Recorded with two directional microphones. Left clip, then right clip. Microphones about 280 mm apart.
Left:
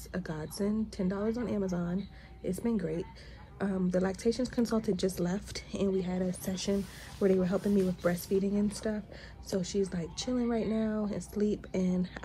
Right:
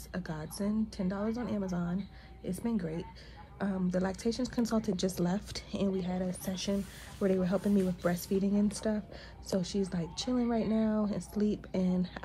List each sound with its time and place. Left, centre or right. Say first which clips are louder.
0.1 s speech: left 2 dB; centre